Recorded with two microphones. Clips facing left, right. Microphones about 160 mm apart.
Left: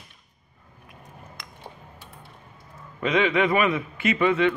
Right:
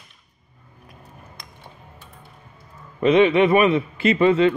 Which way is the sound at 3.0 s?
25° right (ahead or behind).